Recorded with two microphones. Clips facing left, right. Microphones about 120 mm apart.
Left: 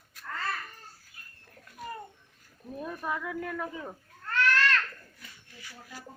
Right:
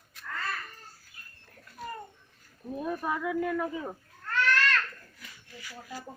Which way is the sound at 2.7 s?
20° right (ahead or behind).